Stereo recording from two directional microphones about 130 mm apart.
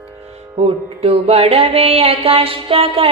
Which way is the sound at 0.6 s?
50° right (ahead or behind).